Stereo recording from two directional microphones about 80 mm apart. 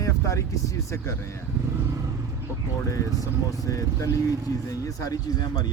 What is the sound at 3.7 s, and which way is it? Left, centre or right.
Speech, left.